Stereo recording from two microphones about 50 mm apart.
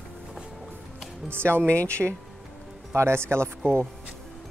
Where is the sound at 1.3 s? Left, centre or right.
Right.